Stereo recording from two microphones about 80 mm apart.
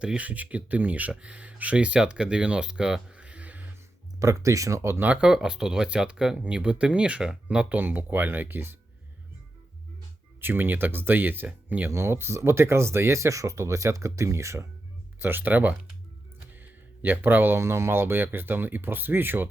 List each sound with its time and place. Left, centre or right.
0.0 s speech: centre
4.2 s speech: right
5.0 s speech: centre
10.4 s speech: right
11.9 s speech: right
15.2 s speech: right